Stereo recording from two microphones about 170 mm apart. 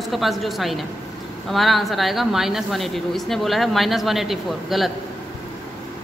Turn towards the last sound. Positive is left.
turn(degrees=0)  # may be behind; listen again after turning